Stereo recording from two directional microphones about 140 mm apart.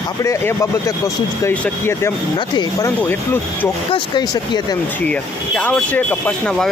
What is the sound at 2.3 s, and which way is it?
Speech, 30° left (ahead or behind).